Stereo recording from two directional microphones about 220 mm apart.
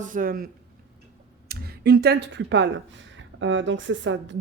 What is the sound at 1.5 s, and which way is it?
Speech, 45° right (ahead or behind).